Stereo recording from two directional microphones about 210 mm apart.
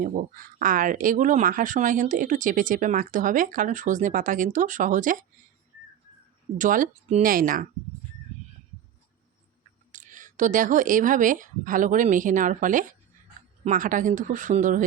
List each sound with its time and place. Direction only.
0.0 s speech: 40° right (ahead or behind)
6.6 s speech: 40° right (ahead or behind)
9.9 s speech: 35° right (ahead or behind)